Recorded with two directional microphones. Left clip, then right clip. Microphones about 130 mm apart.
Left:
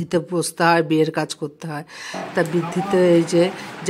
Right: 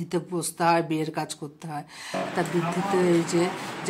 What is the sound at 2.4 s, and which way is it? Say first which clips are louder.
Speech: left 8 dB; 40° left (ahead or behind).